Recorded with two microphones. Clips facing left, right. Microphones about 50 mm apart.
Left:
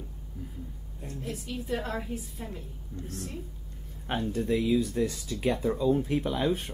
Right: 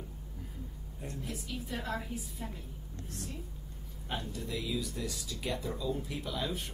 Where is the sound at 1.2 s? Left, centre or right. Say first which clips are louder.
Left 7 dB; left.